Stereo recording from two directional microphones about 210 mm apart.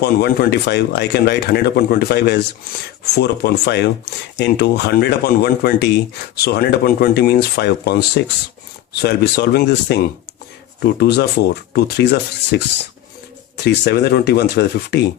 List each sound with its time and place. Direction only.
0.0 s speech: 50° left (ahead or behind)
13.7 s speech: 50° left (ahead or behind)